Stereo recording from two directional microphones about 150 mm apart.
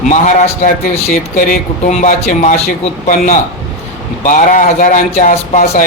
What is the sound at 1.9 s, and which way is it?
Speech, 55° left (ahead or behind).